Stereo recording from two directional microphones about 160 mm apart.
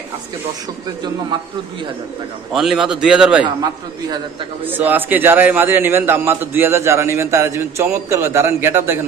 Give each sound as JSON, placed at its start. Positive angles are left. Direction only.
{"t": 2.5, "sound": "a man's voice", "side_deg": 0}
{"t": 3.4, "sound": "a man's voice", "side_deg": -25}
{"t": 4.6, "sound": "a man's voice", "side_deg": -10}